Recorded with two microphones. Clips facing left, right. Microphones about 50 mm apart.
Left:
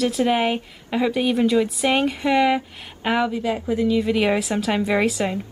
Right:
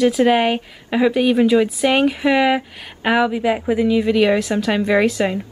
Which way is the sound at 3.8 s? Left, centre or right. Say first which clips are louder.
Right 3 dB; centre.